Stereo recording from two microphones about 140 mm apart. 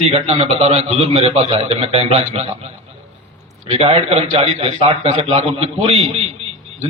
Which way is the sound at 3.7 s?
45° right (ahead or behind).